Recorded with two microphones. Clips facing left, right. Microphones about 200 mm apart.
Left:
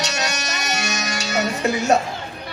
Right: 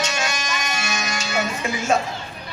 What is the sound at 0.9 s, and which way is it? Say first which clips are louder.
Music: right 1 dB; 40° left (ahead or behind).